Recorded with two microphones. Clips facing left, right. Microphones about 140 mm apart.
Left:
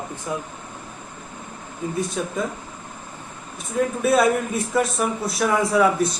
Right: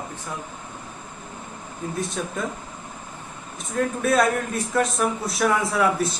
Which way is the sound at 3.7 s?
5° left (ahead or behind).